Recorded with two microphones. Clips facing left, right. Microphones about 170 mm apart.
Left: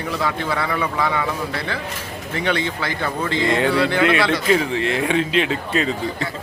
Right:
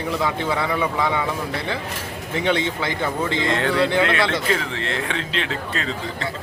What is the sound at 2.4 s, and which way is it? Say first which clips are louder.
Speech: right 1 dB; 20° right (ahead or behind).